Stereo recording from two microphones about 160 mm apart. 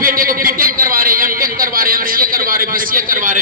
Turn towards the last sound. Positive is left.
turn(degrees=-55)  # may be behind; listen again after turning